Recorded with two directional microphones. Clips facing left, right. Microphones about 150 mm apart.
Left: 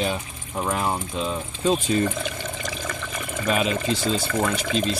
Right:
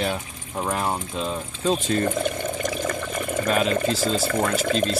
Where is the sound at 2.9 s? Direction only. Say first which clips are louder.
Right 5 dB; 45° right (ahead or behind).